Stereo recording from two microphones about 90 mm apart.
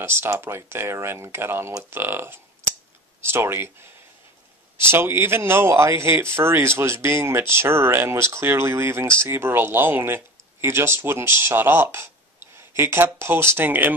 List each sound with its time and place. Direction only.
0.0 s speech: 25° right (ahead or behind)
4.7 s speech: 25° right (ahead or behind)